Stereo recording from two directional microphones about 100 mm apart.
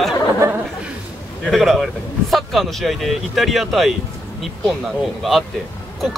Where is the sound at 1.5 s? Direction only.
Centre (ahead or behind).